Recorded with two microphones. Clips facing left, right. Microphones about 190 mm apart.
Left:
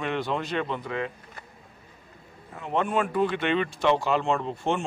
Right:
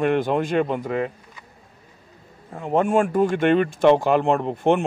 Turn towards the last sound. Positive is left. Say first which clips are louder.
# right 7 dB
turn(degrees=-55)  # may be behind; listen again after turning